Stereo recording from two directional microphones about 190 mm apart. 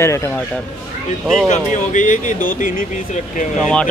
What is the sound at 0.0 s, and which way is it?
Speech, 15° left (ahead or behind).